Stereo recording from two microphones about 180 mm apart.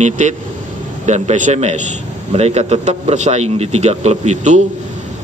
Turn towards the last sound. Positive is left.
turn(degrees=-40)  # may be behind; listen again after turning